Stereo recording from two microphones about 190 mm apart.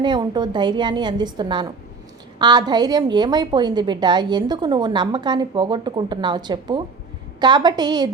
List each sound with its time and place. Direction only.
0.0 s a woman's voice: 25° right (ahead or behind)